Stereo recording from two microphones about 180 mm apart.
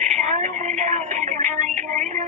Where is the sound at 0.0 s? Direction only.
40° right (ahead or behind).